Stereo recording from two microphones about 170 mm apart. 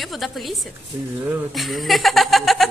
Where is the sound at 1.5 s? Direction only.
Centre (ahead or behind).